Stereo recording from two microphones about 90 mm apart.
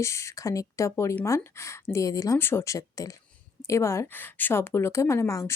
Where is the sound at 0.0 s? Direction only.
35° left (ahead or behind).